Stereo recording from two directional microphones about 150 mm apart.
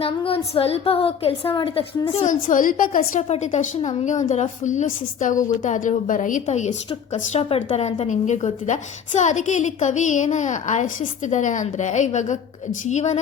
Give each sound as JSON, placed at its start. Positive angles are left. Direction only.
{"t": 0.3, "sound": "a woman's voice", "side_deg": 40}
{"t": 3.2, "sound": "speech", "side_deg": 50}